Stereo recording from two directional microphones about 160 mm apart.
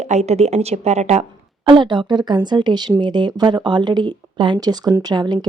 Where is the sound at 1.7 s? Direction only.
30° right (ahead or behind).